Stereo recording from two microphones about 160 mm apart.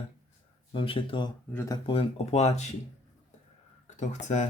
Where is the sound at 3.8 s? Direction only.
45° left (ahead or behind).